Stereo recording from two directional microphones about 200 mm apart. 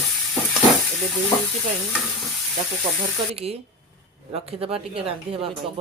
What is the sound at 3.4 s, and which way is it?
Speech, 30° right (ahead or behind).